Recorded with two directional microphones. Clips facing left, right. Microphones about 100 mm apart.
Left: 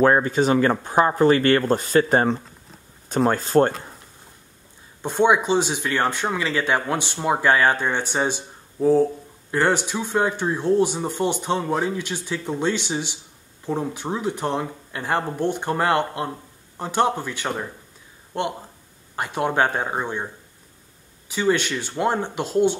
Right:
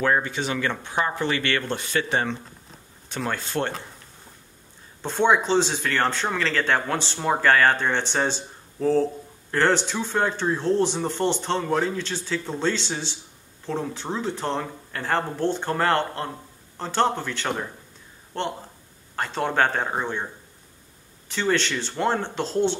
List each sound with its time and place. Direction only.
0.0 s speech: 40° left (ahead or behind)
5.0 s speech: 15° left (ahead or behind)
21.3 s speech: 10° left (ahead or behind)